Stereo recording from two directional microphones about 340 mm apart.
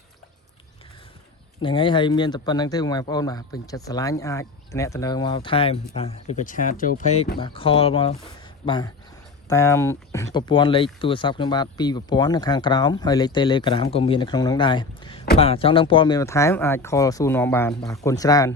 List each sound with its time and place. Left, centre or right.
1.6 s speech: centre